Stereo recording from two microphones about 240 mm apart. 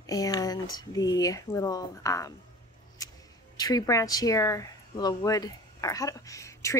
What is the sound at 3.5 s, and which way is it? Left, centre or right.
Speech, centre.